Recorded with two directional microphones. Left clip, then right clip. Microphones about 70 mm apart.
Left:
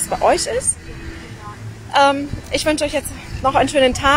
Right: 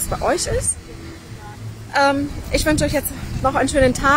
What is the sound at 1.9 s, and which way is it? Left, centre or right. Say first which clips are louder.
A woman's voice: left 3 dB; centre.